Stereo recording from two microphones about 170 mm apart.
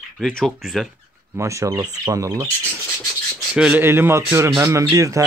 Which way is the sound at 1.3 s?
15° right (ahead or behind).